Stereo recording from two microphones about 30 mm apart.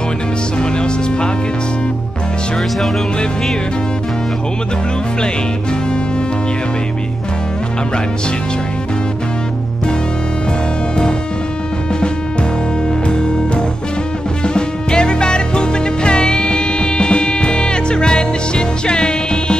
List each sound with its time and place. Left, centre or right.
0.6 s music: left
13.1 s music: left